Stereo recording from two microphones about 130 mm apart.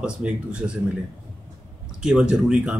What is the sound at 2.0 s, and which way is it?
Speech, 5° right (ahead or behind).